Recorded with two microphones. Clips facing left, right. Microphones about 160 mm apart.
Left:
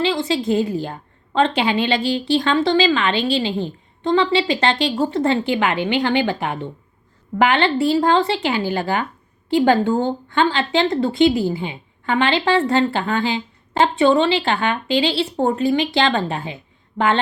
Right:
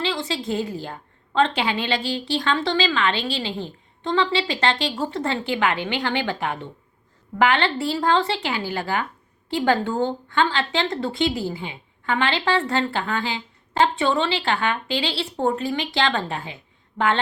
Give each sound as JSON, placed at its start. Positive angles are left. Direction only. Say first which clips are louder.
{"t": 0.0, "sound": "a woman's voice", "louder": "left 6 dB", "side_deg": 15}